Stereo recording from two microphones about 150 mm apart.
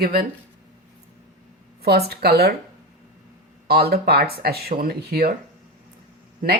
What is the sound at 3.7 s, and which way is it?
Speech, 90° right.